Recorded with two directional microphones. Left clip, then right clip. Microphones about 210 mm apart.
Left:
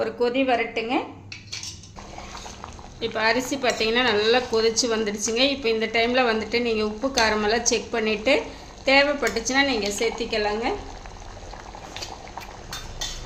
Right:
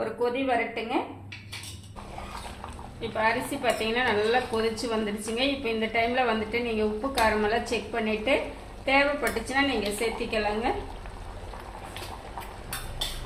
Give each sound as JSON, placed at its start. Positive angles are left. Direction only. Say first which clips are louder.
{"t": 0.0, "sound": "a woman's voice", "louder": "left 5 dB", "side_deg": 55}
{"t": 3.0, "sound": "a woman's voice", "louder": "left 4 dB", "side_deg": 50}